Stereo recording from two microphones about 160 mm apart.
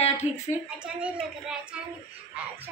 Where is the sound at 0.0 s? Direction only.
40° left (ahead or behind).